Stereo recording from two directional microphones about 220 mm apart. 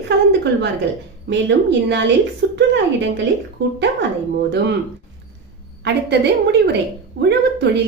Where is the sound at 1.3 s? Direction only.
50° right (ahead or behind).